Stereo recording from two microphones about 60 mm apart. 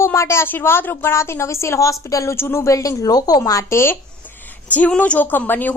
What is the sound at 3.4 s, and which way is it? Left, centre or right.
Speech, left.